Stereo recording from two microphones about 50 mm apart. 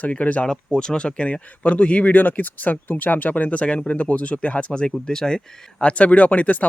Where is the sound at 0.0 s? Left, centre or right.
Left.